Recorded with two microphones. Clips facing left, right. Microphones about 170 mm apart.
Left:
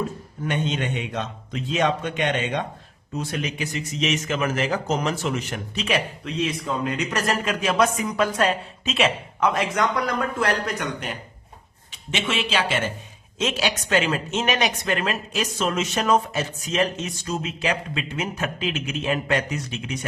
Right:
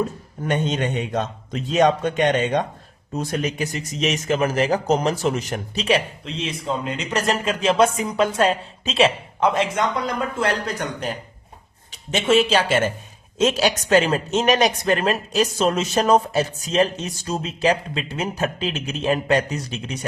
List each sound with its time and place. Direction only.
0.4 s a man's voice: 40° right (ahead or behind)